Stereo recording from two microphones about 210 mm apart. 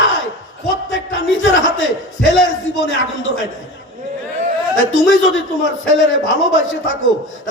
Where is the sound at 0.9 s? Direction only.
65° left (ahead or behind).